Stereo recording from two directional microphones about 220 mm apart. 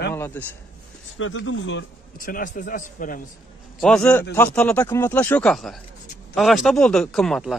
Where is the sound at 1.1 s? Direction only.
65° left (ahead or behind).